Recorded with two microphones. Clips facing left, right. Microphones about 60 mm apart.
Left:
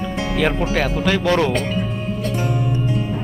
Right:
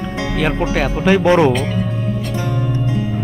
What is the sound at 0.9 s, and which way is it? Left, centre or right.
Speech, centre.